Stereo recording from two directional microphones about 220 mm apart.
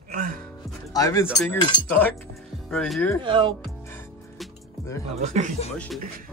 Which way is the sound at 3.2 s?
20° right (ahead or behind).